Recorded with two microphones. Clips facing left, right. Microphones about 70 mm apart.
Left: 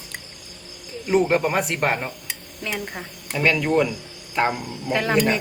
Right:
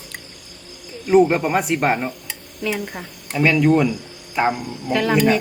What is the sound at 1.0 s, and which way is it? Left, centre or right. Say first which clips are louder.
Speech: right 4 dB; centre.